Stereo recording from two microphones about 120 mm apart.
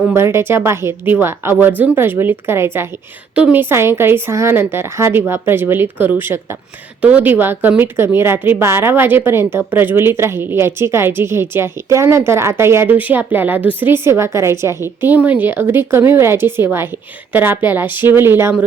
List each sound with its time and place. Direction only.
0.1 s a woman's voice: 20° right (ahead or behind)